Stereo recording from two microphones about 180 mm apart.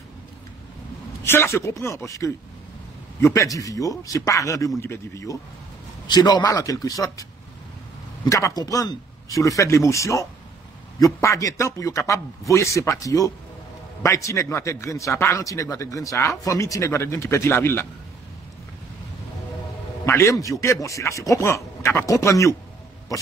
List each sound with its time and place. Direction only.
1.2 s a man's voice: 15° left (ahead or behind)
8.3 s speech: 20° left (ahead or behind)
20.1 s speech: 15° left (ahead or behind)